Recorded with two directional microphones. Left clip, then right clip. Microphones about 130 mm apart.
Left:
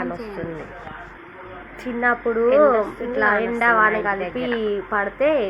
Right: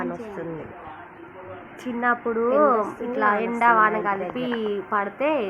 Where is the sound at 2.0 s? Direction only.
20° left (ahead or behind).